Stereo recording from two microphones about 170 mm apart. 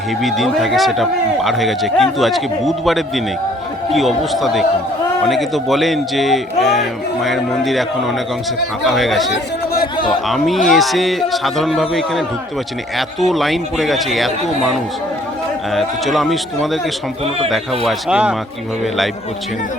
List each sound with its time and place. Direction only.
0.2 s a man's voice: centre (ahead or behind)
9.3 s chatter: 65° left (ahead or behind)
10.1 s a man's voice: centre (ahead or behind)